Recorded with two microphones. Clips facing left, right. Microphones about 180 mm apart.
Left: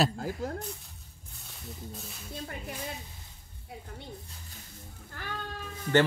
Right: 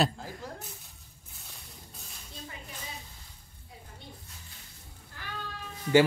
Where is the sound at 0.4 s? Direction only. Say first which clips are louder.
Left 7 dB; 45° left (ahead or behind).